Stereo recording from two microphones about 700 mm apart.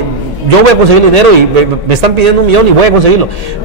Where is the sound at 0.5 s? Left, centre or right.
Right.